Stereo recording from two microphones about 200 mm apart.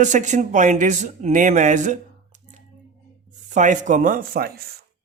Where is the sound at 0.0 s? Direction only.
35° right (ahead or behind).